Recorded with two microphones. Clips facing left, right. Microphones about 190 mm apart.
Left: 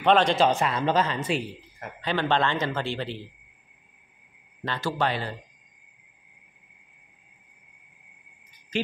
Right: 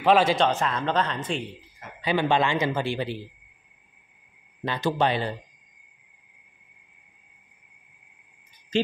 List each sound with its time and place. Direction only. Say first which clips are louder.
0.0 s speech: even; 5° right (ahead or behind)
0.5 s speech: left 2 dB; 10° left (ahead or behind)
2.0 s speech: right 2 dB; 10° right (ahead or behind)
4.6 s speech: right 3 dB; 20° right (ahead or behind)